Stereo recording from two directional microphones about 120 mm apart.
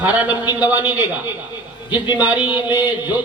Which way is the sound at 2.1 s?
10° right (ahead or behind).